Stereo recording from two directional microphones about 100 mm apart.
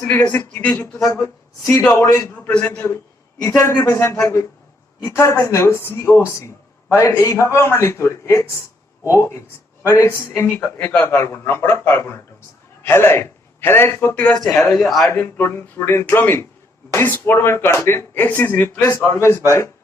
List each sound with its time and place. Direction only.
0.0 s a man's voice: 25° left (ahead or behind)
0.9 s a man's voice: 30° left (ahead or behind)
2.3 s a man's voice: 15° left (ahead or behind)
3.4 s a man's voice: 30° left (ahead or behind); by 15.1 s 5° left (ahead or behind)
15.1 s a man's voice: 20° left (ahead or behind)